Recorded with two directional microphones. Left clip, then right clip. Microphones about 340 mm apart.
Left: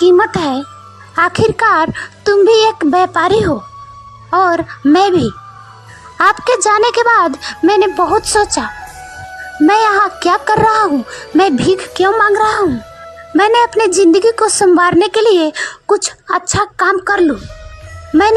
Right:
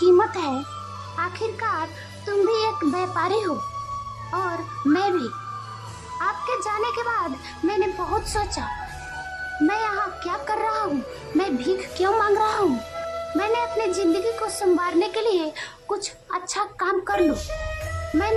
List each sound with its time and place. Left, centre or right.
0.0 s music: centre
1.1 s a woman's voice: left
9.6 s a woman's voice: left